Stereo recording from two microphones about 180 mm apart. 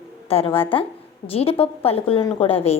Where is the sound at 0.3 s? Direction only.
30° left (ahead or behind).